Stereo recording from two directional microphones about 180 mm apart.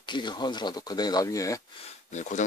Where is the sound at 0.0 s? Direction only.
25° left (ahead or behind).